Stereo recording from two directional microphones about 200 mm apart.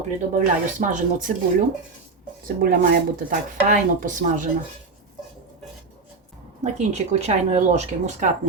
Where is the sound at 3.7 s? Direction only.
40° right (ahead or behind).